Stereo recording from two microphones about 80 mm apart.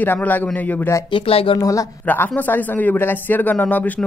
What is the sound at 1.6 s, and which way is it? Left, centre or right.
Speech, left.